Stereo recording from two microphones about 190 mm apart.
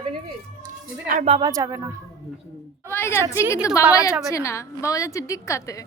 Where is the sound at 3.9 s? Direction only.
15° left (ahead or behind).